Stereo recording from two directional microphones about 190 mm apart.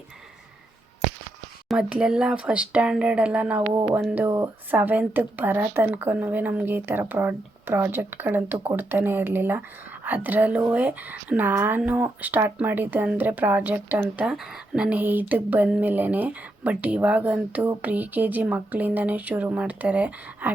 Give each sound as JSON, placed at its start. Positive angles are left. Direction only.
{"t": 1.6, "sound": "speech", "side_deg": -5}
{"t": 3.7, "sound": "speech", "side_deg": -15}